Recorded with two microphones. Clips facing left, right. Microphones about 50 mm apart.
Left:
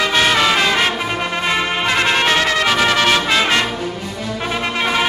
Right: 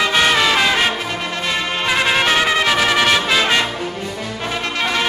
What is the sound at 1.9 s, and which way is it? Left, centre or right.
Music, centre.